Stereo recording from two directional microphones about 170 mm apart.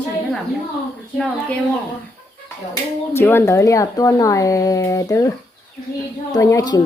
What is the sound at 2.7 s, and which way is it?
A woman's voice, 15° left (ahead or behind).